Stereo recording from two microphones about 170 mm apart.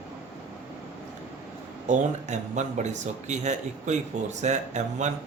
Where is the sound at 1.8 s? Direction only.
45° right (ahead or behind).